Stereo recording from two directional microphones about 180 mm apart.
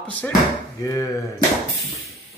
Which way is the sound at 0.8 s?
20° left (ahead or behind).